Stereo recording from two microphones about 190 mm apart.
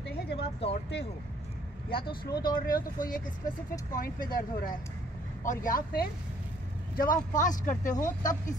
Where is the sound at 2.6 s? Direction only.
45° left (ahead or behind).